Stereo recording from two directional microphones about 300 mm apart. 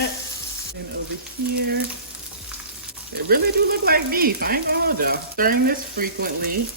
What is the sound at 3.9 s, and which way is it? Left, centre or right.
Speech, right.